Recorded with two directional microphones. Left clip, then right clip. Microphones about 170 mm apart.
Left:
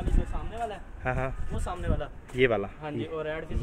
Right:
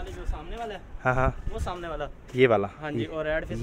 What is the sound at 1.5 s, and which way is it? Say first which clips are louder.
Speech: right 1 dB; 55° right (ahead or behind).